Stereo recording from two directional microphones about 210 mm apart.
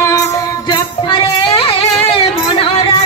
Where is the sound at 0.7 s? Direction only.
25° left (ahead or behind).